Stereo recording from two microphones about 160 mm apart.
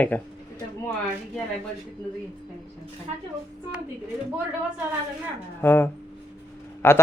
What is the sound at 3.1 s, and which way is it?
Speech, 45° right (ahead or behind).